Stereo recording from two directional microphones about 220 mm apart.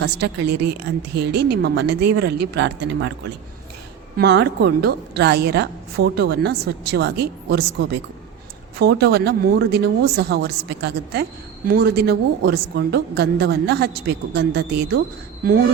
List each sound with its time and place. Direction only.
0.0 s a woman's voice: 50° right (ahead or behind)
4.2 s a woman's voice: 50° right (ahead or behind)